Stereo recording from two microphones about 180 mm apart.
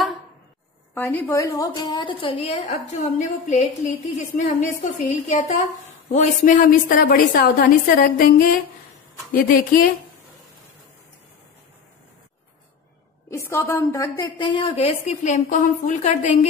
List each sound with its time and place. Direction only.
0.9 s a woman's voice: 10° left (ahead or behind); by 9.8 s 50° left (ahead or behind)
13.3 s a woman's voice: 15° left (ahead or behind)
14.4 s a woman's voice: 30° left (ahead or behind)